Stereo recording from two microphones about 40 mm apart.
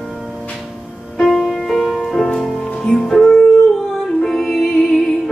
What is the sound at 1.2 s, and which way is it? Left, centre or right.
Music, centre.